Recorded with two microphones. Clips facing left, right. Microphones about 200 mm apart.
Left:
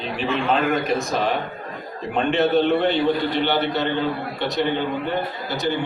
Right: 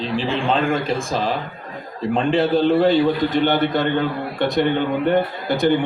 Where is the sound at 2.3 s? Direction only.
30° right (ahead or behind).